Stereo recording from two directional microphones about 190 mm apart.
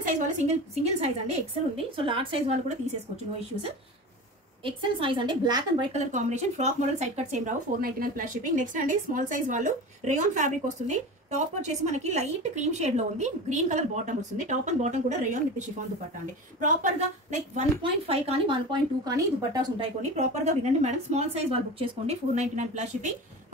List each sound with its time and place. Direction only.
0.0 s a woman's voice: 40° right (ahead or behind)
4.6 s a woman's voice: 25° right (ahead or behind)
5.9 s speech: 40° right (ahead or behind)
16.5 s speech: 40° right (ahead or behind); by 19.9 s 20° right (ahead or behind)
20.0 s speech: 40° right (ahead or behind)